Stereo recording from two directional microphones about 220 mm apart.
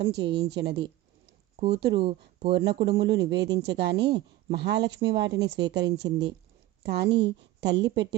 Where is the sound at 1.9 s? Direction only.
25° right (ahead or behind).